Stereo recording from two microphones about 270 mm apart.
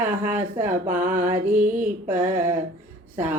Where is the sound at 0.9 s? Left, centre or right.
Right.